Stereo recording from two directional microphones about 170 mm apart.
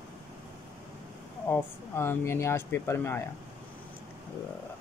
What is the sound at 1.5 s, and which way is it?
Speech, 15° left (ahead or behind).